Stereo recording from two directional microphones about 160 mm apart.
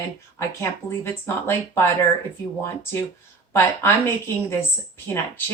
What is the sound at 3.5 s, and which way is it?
Speech, 15° left (ahead or behind).